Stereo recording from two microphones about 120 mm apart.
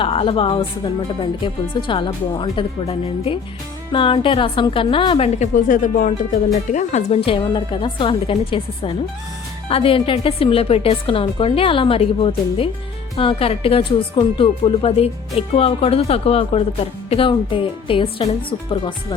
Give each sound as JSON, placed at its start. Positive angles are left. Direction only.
{"t": 0.0, "sound": "speech", "side_deg": 50}
{"t": 5.4, "sound": "speech", "side_deg": 90}
{"t": 7.1, "sound": "speech", "side_deg": 50}